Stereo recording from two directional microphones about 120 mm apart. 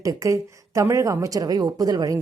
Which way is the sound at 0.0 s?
30° right (ahead or behind).